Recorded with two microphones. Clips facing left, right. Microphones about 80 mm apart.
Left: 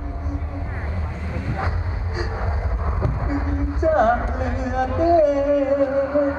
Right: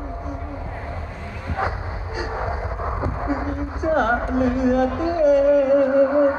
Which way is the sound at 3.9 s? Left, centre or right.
Left.